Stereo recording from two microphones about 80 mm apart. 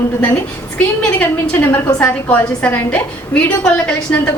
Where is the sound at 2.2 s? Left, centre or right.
Centre.